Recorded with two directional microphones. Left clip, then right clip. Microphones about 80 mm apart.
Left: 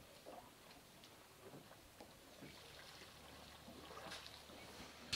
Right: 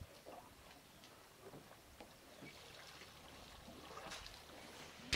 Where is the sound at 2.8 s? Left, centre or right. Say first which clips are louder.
Right 1 dB; centre.